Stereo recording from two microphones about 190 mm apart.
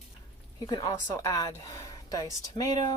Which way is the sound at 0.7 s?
20° left (ahead or behind).